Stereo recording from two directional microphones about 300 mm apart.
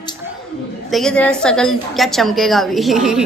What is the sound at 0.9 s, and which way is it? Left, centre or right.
Speech, centre.